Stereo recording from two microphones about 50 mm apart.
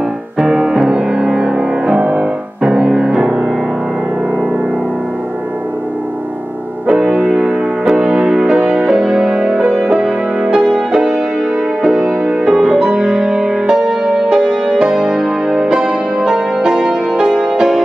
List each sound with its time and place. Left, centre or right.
0.4 s music: centre
6.9 s music: centre
10.4 s music: centre
12.5 s music: centre